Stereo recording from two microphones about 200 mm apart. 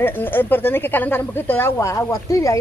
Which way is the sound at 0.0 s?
10° left (ahead or behind).